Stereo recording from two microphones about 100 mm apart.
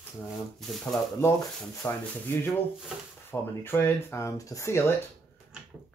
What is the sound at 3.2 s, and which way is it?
Speech, 25° left (ahead or behind).